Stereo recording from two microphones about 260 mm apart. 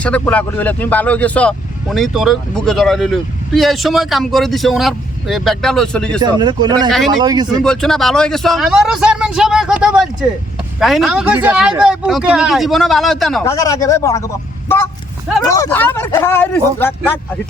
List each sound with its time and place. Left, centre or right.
0.0 s speech: centre
6.2 s speech: centre
7.6 s speech: centre
13.4 s speech: centre
15.4 s speech: centre